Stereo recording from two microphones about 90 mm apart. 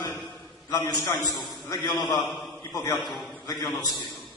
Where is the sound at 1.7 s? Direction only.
50° left (ahead or behind).